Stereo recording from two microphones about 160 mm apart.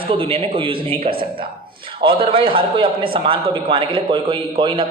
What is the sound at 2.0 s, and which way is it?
A man's voice, 35° right (ahead or behind).